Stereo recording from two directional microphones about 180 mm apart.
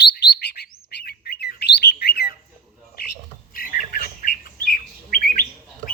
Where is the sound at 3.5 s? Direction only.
50° left (ahead or behind).